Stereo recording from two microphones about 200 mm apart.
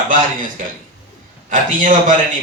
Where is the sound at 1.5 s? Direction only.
40° right (ahead or behind).